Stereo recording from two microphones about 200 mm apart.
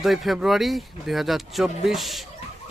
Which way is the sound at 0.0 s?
Centre (ahead or behind).